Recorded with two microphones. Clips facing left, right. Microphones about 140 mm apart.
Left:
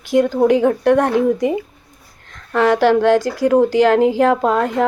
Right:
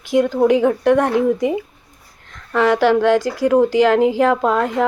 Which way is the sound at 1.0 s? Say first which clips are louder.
Left 1 dB; 5° right (ahead or behind).